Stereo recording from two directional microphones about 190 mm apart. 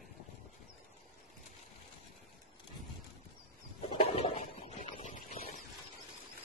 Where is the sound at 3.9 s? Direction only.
35° left (ahead or behind).